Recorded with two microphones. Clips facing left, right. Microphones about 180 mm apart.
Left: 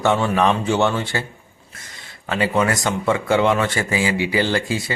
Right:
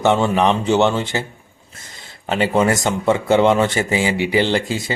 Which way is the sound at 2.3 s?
25° right (ahead or behind).